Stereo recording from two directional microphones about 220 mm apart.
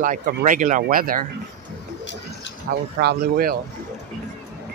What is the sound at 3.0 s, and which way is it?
Speech, 45° right (ahead or behind).